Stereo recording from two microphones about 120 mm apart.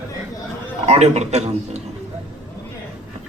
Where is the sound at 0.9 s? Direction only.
65° right (ahead or behind).